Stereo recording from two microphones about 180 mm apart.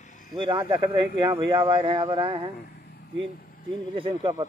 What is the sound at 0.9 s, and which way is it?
Speech, 25° right (ahead or behind).